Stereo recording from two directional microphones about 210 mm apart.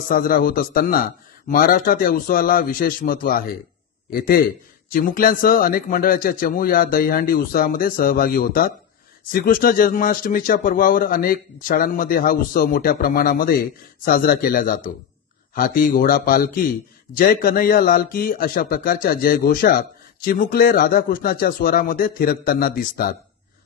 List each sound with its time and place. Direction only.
0.1 s a man's voice: 45° left (ahead or behind)